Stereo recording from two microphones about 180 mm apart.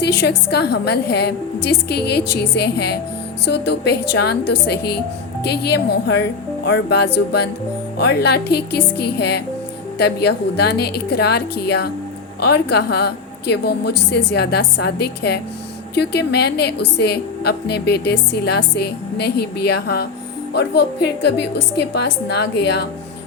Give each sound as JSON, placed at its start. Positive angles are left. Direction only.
{"t": 0.0, "sound": "a woman's voice", "side_deg": 65}